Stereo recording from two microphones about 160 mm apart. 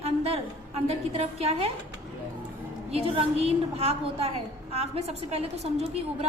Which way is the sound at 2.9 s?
40° right (ahead or behind).